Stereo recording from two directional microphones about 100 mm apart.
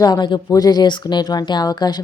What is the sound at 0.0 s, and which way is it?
Speech, 45° left (ahead or behind).